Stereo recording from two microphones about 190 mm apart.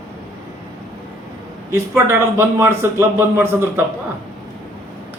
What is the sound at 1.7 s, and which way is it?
A man's voice, 15° right (ahead or behind).